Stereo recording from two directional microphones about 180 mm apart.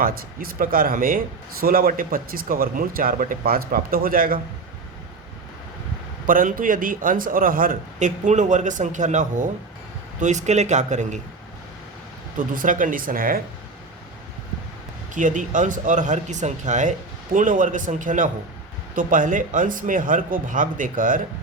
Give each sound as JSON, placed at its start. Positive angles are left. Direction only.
{"t": 0.0, "sound": "a man's voice", "side_deg": -55}
{"t": 6.2, "sound": "a man's voice", "side_deg": -50}
{"t": 12.4, "sound": "a man's voice", "side_deg": -45}
{"t": 15.1, "sound": "a man's voice", "side_deg": -45}